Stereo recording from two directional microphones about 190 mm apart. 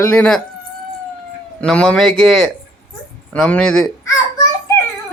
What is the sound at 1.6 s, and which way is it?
Speech, 5° left (ahead or behind).